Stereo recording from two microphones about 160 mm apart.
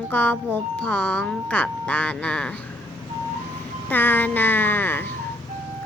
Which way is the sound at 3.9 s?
10° left (ahead or behind).